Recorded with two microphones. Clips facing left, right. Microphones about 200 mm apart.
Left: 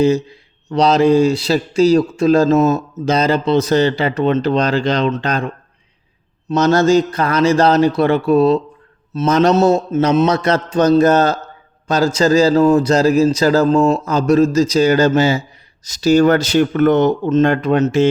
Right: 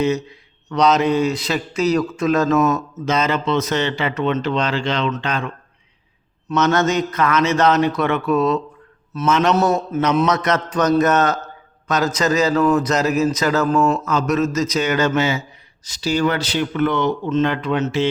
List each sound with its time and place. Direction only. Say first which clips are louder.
0.0 s a man's voice: left 5 dB; 30° left (ahead or behind)